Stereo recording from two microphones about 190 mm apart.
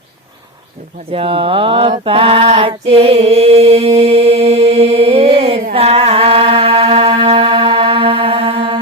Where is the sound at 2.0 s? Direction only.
30° right (ahead or behind).